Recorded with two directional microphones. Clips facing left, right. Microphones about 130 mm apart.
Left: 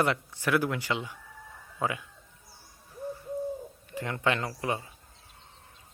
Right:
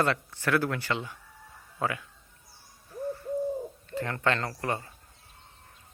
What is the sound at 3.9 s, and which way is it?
Speech, 15° left (ahead or behind).